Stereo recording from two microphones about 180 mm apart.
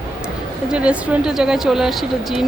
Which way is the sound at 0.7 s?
5° right (ahead or behind).